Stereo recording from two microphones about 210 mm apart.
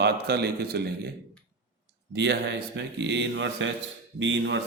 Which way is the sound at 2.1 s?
55° right (ahead or behind).